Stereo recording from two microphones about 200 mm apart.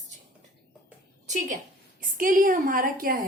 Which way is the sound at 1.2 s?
35° right (ahead or behind).